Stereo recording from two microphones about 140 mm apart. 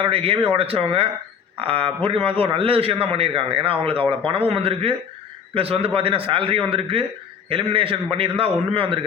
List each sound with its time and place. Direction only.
0.0 s a man's voice: 40° right (ahead or behind)